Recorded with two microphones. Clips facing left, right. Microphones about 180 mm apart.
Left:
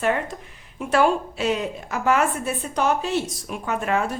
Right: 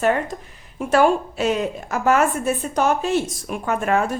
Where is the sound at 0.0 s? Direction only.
40° right (ahead or behind).